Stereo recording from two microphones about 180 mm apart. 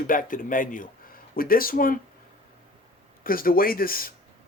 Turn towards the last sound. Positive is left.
turn(degrees=55)  # may be behind; listen again after turning